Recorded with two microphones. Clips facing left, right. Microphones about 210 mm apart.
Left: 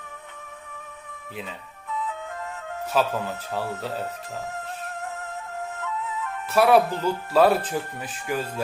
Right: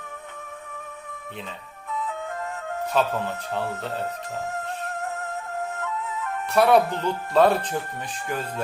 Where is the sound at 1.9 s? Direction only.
45° right (ahead or behind).